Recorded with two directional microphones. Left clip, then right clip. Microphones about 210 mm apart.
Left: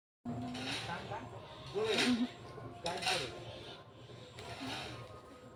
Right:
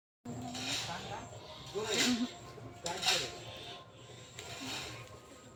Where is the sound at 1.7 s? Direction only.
35° right (ahead or behind).